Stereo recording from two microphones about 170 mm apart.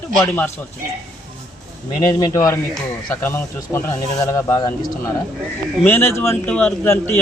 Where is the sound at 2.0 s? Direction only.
20° left (ahead or behind).